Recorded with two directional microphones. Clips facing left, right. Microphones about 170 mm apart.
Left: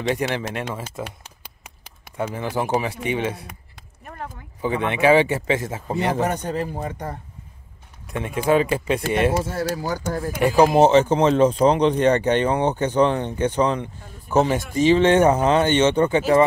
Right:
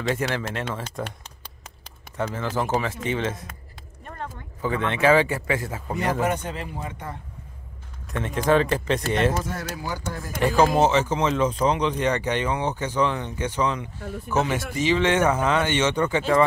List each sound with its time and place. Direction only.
0.0 s speech: 20° left (ahead or behind)
2.1 s speech: 15° left (ahead or behind)
4.0 s a sound: 5° left (ahead or behind)
4.6 s speech: 20° left (ahead or behind)
6.1 s speech: 40° left (ahead or behind)
8.1 s speech: 10° left (ahead or behind)
9.4 s speech: 30° left (ahead or behind)
10.3 s speech: 15° left (ahead or behind)
10.7 s speech: 30° left (ahead or behind)